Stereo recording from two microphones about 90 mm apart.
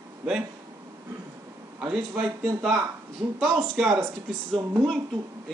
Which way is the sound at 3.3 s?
5° right (ahead or behind).